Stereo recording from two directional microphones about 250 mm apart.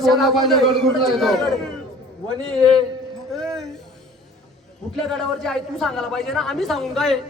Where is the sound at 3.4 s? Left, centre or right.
Centre.